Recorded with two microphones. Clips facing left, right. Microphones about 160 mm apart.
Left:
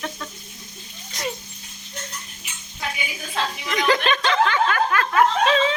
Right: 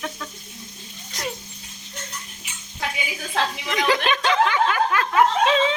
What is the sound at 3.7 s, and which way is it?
Snicker, 10° right (ahead or behind).